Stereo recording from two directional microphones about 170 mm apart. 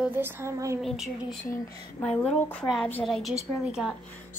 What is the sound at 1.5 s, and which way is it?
Speech, 10° left (ahead or behind).